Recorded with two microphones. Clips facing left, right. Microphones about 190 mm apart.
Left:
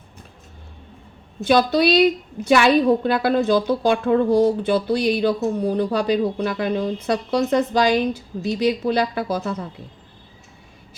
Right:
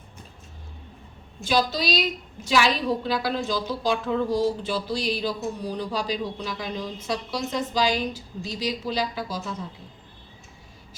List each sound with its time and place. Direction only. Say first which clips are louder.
1.5 s a woman's voice: left 8 dB; 60° left (ahead or behind)